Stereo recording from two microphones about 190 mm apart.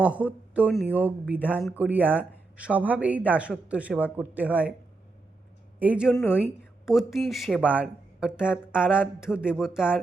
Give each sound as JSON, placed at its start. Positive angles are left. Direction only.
{"t": 0.2, "sound": "speech", "side_deg": -5}
{"t": 5.8, "sound": "speech", "side_deg": -5}